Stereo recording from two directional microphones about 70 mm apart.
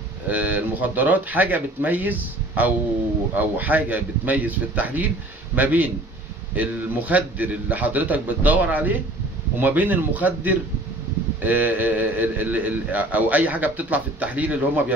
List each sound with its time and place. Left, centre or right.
0.3 s a man's voice: right